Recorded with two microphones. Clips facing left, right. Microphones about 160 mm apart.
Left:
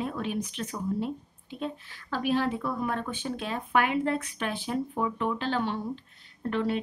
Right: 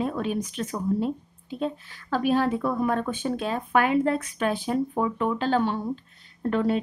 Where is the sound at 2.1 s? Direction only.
45° right (ahead or behind).